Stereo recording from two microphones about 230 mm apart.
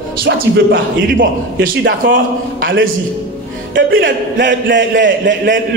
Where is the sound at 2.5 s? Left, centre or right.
Right.